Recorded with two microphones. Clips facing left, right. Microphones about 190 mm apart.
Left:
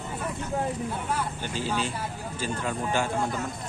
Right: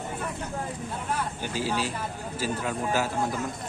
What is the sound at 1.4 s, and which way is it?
Speech, 5° right (ahead or behind).